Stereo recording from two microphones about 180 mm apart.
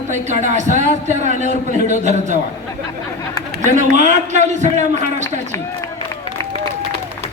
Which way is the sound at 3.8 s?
40° right (ahead or behind).